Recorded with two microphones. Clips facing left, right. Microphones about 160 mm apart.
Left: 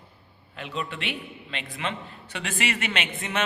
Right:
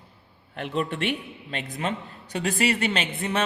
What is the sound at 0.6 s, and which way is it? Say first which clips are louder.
A man's voice: right 6 dB; 55° right (ahead or behind).